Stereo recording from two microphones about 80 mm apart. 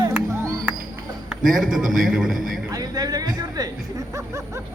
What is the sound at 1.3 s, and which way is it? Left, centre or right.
A man's voice, centre.